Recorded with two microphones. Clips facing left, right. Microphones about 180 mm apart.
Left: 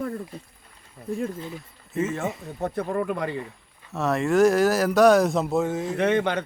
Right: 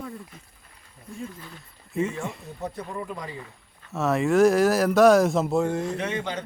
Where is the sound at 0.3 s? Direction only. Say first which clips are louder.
Left 10 dB; 35° left (ahead or behind).